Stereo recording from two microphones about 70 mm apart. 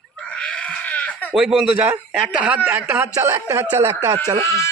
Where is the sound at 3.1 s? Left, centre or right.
Right.